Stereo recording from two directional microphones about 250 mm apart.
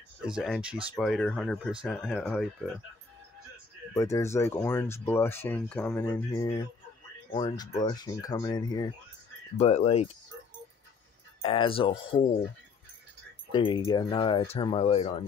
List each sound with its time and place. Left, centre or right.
0.3 s speech: centre
3.9 s speech: centre
11.4 s speech: left
13.5 s speech: centre